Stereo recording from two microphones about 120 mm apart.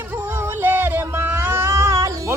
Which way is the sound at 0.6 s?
15° right (ahead or behind).